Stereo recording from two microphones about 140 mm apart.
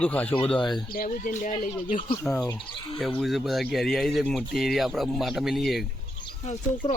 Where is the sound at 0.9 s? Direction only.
75° left (ahead or behind).